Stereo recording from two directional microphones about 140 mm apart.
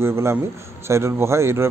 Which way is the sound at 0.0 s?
20° right (ahead or behind).